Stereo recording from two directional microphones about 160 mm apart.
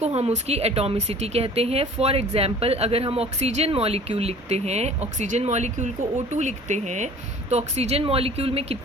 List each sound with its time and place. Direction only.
0.0 s speech: 40° right (ahead or behind)